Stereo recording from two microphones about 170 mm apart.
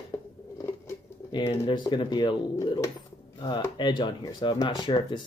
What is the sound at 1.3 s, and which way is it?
Speech, 30° left (ahead or behind).